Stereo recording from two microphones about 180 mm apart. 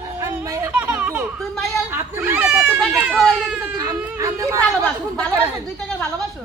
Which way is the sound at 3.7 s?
15° right (ahead or behind).